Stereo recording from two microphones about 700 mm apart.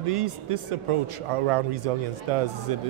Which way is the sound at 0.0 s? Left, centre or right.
Right.